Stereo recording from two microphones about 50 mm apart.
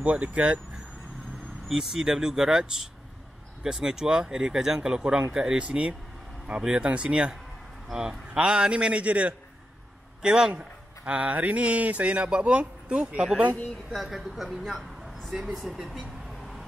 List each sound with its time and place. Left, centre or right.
0.0 s speech: right
1.7 s speech: centre; by 9.3 s right
10.2 s speech: centre
10.6 s speech: right
14.0 s speech: centre